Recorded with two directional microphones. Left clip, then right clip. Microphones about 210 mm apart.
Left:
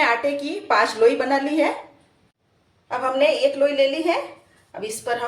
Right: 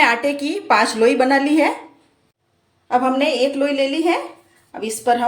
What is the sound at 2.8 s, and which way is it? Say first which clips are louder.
A woman's voice: right 2 dB; 45° right (ahead or behind).